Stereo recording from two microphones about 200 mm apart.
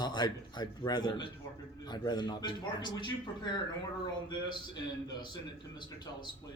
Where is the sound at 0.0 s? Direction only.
20° left (ahead or behind).